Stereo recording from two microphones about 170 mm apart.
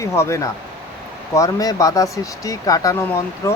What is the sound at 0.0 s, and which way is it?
Speech, 15° left (ahead or behind).